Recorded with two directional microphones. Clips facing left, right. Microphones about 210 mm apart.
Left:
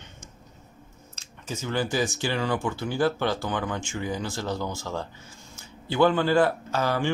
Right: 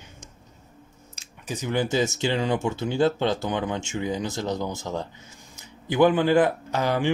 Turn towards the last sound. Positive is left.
turn(degrees=-20)  # may be behind; listen again after turning